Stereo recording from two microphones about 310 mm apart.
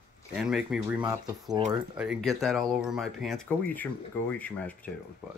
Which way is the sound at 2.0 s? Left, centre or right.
Centre.